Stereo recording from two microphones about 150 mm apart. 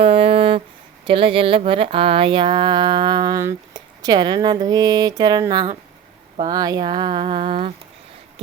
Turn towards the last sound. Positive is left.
turn(degrees=-35)  # may be behind; listen again after turning